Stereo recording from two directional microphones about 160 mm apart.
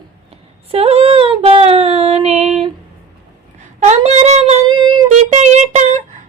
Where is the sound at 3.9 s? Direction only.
45° right (ahead or behind).